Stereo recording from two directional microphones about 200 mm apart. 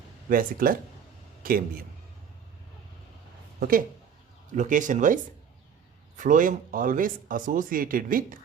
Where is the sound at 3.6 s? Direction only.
45° right (ahead or behind).